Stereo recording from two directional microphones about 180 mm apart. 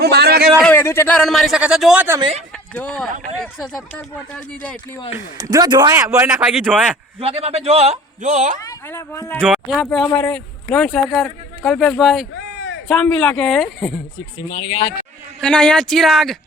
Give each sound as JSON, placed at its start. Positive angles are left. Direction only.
{"t": 0.0, "sound": "a man's voice", "side_deg": -65}
{"t": 0.4, "sound": "speech", "side_deg": 0}
{"t": 0.7, "sound": "speech", "side_deg": 10}
{"t": 2.7, "sound": "speech", "side_deg": 5}
{"t": 5.1, "sound": "a man's voice", "side_deg": -20}
{"t": 6.4, "sound": "speech", "side_deg": -5}
{"t": 7.2, "sound": "a man's voice", "side_deg": -35}
{"t": 8.6, "sound": "speech", "side_deg": 20}
{"t": 9.4, "sound": "speech", "side_deg": 5}
{"t": 12.3, "sound": "a sound", "side_deg": 75}
{"t": 12.9, "sound": "speech", "side_deg": 5}
{"t": 14.5, "sound": "speech", "side_deg": 30}
{"t": 15.4, "sound": "speech", "side_deg": 5}